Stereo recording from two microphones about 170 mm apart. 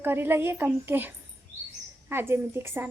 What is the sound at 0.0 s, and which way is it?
A woman's voice, 15° right (ahead or behind).